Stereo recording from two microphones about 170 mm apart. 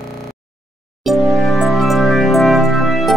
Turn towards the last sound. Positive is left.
turn(degrees=0)  # may be behind; listen again after turning